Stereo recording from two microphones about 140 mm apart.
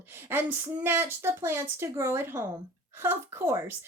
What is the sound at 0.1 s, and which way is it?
A woman's voice, 15° right (ahead or behind).